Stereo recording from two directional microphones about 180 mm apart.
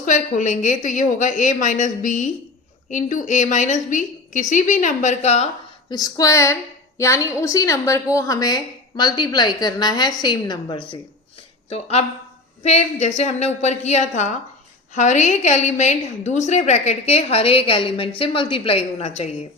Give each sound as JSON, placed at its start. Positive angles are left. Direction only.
{"t": 0.0, "sound": "a woman's voice", "side_deg": 45}
{"t": 5.9, "sound": "a woman's voice", "side_deg": 20}